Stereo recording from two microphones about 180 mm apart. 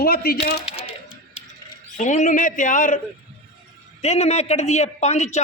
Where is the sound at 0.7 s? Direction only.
30° left (ahead or behind).